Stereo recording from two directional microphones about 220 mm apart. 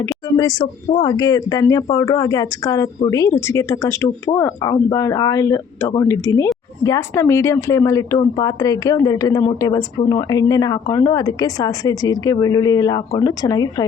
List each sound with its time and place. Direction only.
0.0 s a woman's voice: 15° left (ahead or behind)